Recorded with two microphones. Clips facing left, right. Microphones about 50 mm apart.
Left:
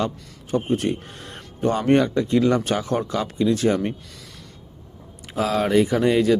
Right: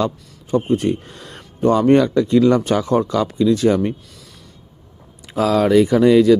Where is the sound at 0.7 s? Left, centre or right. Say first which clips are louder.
Right 4 dB; left.